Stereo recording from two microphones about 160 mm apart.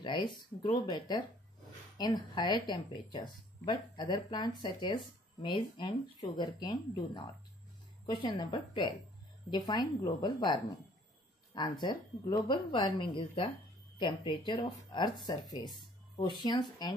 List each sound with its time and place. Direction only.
0.0 s speech: 30° left (ahead or behind)